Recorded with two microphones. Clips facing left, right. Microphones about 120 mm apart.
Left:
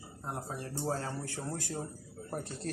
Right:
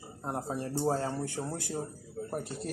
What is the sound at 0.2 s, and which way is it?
Speech, 30° right (ahead or behind).